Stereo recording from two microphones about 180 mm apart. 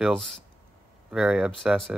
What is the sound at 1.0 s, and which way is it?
Speech, 5° right (ahead or behind).